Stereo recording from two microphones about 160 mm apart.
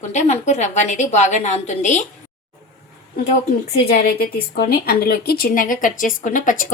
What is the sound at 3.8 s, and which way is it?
Speech, 75° left (ahead or behind).